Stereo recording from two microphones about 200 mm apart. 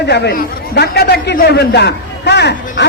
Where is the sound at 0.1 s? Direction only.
55° left (ahead or behind).